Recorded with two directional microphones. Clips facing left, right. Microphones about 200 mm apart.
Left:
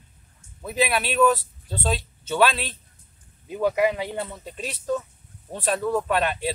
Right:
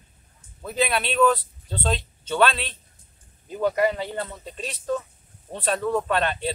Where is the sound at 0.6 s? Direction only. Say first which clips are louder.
Left 1 dB; 5° left (ahead or behind).